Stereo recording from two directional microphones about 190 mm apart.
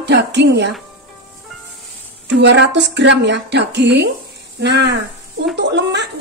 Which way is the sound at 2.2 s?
70° right (ahead or behind).